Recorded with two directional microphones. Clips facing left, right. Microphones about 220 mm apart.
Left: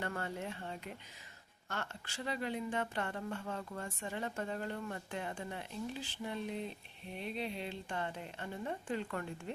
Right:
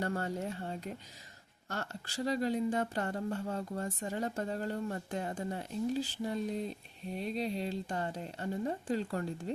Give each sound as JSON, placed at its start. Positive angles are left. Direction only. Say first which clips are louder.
{"t": 0.0, "sound": "speech", "louder": "right 5 dB", "side_deg": -40}